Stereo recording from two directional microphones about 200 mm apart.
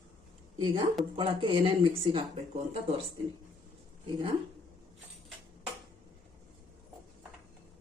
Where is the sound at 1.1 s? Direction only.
25° right (ahead or behind).